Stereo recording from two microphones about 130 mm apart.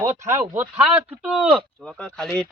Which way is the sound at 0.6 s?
10° right (ahead or behind).